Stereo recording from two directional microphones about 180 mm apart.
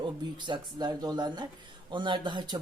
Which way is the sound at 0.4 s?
25° right (ahead or behind).